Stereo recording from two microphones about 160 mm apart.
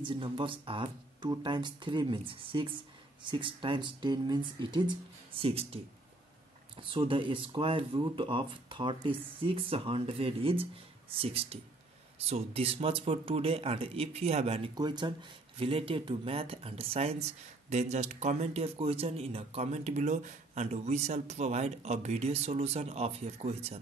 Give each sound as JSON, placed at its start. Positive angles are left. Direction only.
{"t": 0.0, "sound": "speech", "side_deg": -30}
{"t": 7.1, "sound": "speech", "side_deg": -35}
{"t": 14.8, "sound": "speech", "side_deg": -30}